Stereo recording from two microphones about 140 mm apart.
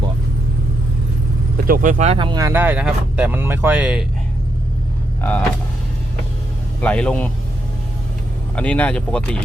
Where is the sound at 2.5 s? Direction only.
15° right (ahead or behind).